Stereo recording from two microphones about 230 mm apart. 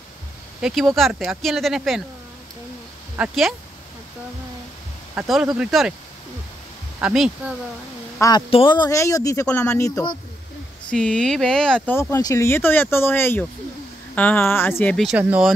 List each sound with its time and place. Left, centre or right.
0.6 s speech: centre
3.2 s speech: centre
5.1 s speech: centre
7.0 s speech: centre
8.2 s speech: centre
10.9 s speech: centre